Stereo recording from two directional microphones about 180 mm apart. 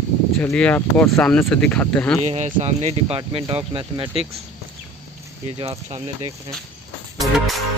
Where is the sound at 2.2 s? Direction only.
40° right (ahead or behind).